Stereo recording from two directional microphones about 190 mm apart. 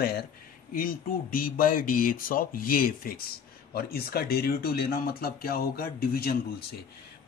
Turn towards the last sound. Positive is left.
turn(degrees=55)  # may be behind; listen again after turning